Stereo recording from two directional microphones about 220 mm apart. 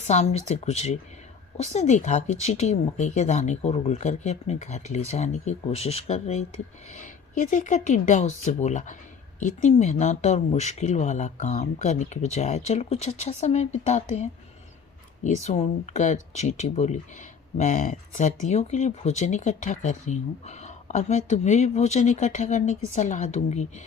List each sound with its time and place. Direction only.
0.1 s speech: 30° left (ahead or behind)